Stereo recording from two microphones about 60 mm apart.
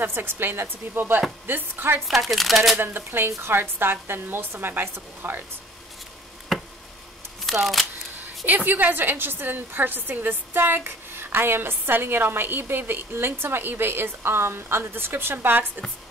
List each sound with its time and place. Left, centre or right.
0.0 s a woman's voice: right
2.0 s speech: centre
2.8 s a woman's voice: right
6.5 s a sound: centre
7.5 s speech: centre
8.5 s a woman's voice: right